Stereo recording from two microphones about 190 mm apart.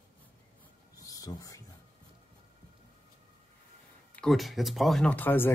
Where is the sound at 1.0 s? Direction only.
20° left (ahead or behind).